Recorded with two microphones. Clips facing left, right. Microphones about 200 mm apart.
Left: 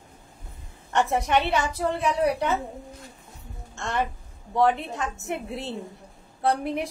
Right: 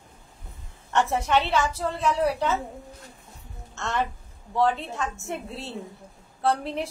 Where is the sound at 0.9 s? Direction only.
15° left (ahead or behind).